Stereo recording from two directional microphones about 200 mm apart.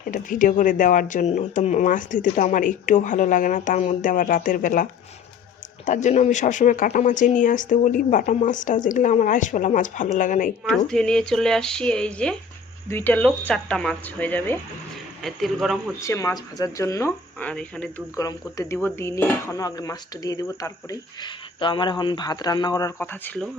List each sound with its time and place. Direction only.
0.1 s speech: 40° left (ahead or behind)
10.7 s speech: 5° left (ahead or behind)
16.0 s speech: 15° left (ahead or behind)
18.2 s speech: 15° left (ahead or behind)